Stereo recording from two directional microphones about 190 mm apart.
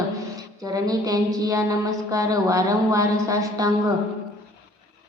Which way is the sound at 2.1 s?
15° right (ahead or behind).